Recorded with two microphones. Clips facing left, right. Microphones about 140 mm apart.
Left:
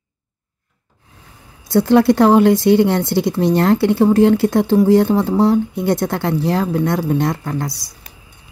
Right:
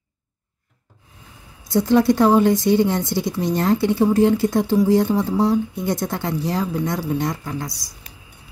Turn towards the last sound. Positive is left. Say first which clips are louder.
# left 5 dB
turn(degrees=60)  # may be behind; listen again after turning